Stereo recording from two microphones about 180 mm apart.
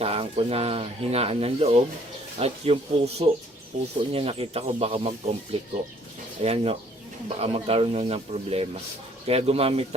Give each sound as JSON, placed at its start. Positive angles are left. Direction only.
{"t": 0.0, "sound": "speech", "side_deg": -35}